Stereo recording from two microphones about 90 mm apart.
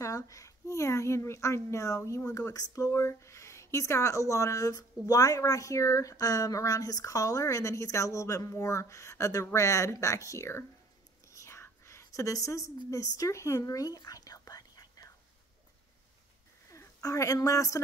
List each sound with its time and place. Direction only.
0.0 s speech: 35° left (ahead or behind)
11.3 s whispering: 30° left (ahead or behind)
16.6 s a woman's voice: 35° left (ahead or behind)